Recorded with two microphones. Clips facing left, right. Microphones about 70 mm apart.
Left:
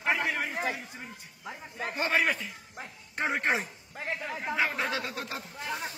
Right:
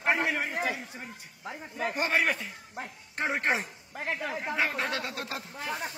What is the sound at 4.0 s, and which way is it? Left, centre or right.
Speech, right.